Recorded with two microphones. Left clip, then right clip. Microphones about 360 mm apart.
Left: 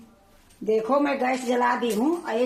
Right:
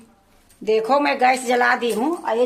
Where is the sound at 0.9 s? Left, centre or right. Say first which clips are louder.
Right 9 dB; right.